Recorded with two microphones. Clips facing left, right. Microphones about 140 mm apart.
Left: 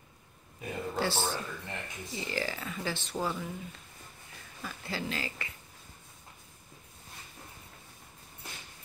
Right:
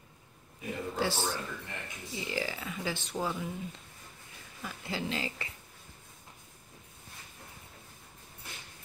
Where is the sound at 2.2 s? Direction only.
10° right (ahead or behind).